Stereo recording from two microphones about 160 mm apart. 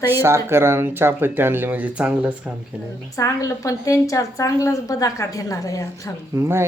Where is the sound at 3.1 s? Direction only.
20° left (ahead or behind).